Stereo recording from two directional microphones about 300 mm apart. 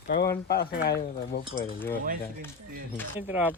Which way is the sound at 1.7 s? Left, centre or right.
Centre.